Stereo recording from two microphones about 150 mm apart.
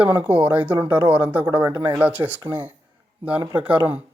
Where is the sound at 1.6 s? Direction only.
25° right (ahead or behind).